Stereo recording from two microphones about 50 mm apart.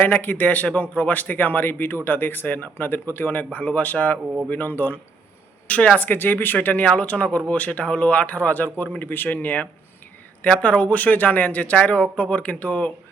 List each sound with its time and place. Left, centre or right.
0.0 s a man's voice: left
4.4 s a man's voice: left
5.6 s speech: left
6.1 s a man's voice: left
6.8 s a man's voice: left
10.6 s speech: left